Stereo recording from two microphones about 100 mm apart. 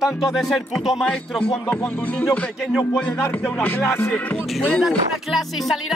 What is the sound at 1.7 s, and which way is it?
Music, 15° left (ahead or behind).